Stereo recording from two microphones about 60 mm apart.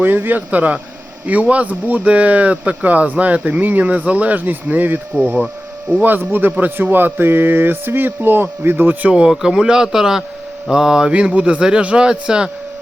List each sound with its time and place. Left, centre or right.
0.0 s speech: right
9.0 s a man's voice: centre